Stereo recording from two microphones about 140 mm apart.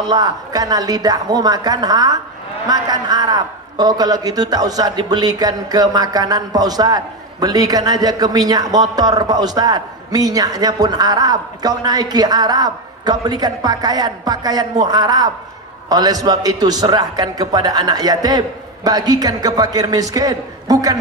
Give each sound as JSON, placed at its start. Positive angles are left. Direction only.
{"t": 0.1, "sound": "a man's voice", "side_deg": -25}